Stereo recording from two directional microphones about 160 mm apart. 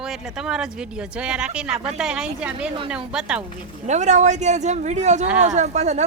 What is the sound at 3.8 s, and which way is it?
Speech, 45° right (ahead or behind).